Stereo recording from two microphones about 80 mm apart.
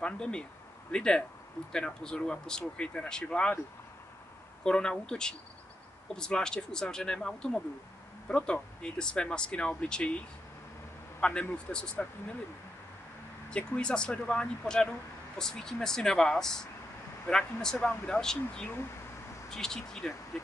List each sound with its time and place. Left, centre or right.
0.0 s speech: centre
4.6 s speech: centre
11.1 s speech: centre
13.5 s speech: centre